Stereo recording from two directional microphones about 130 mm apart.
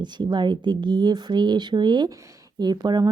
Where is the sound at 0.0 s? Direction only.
35° right (ahead or behind).